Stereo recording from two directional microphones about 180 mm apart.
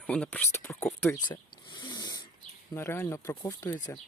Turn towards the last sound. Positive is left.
turn(degrees=20)  # may be behind; listen again after turning